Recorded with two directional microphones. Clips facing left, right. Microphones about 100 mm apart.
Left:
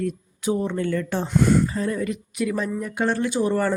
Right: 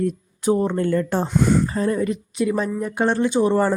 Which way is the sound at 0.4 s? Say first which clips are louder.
Right 4 dB; 45° right (ahead or behind).